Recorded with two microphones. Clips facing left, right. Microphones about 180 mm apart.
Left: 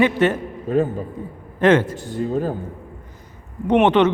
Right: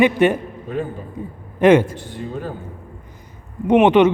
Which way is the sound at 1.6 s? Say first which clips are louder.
Right 3 dB; 15° right (ahead or behind).